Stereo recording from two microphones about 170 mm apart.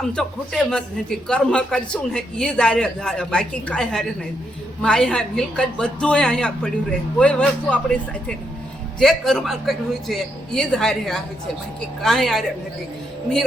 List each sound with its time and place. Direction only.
0.0 s a man's voice: 5° left (ahead or behind)